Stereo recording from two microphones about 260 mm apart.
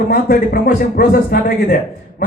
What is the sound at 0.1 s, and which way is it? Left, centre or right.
A man's voice, left.